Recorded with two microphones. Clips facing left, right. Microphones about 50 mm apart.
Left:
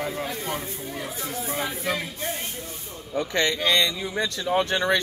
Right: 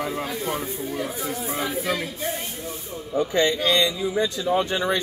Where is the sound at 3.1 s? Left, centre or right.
Left.